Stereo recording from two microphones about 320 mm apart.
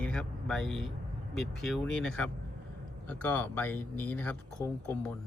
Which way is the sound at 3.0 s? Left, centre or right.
Centre.